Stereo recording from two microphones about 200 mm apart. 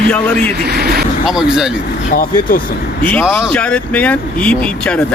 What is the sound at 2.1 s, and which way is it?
Speech, 45° left (ahead or behind).